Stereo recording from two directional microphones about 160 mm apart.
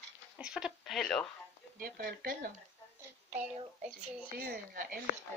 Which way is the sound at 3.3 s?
10° right (ahead or behind).